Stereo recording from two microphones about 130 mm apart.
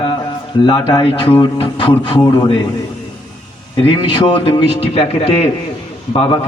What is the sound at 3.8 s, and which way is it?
A man's voice, 40° left (ahead or behind).